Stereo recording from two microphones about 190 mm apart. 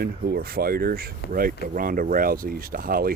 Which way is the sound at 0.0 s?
55° right (ahead or behind).